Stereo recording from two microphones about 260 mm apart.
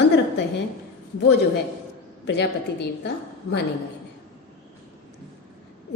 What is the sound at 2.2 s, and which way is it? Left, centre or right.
Speech, left.